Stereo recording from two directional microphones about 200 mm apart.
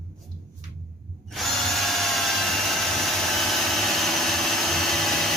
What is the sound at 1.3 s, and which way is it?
Tools, centre (ahead or behind).